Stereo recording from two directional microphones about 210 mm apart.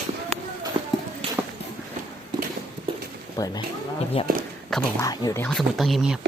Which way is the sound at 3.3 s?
20° left (ahead or behind).